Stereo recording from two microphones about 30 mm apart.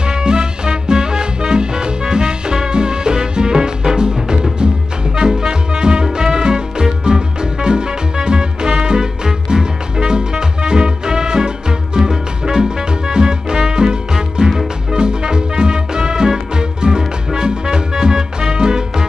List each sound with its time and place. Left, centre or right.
0.1 s music: right